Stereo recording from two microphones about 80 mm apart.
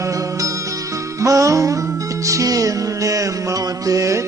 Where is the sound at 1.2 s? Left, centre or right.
Right.